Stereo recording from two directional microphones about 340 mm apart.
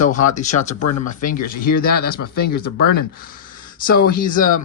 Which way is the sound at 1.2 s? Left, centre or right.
Left.